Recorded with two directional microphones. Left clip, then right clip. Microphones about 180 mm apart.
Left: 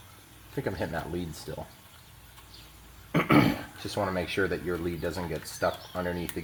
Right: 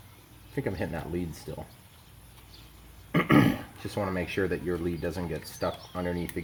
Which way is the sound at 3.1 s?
20° right (ahead or behind).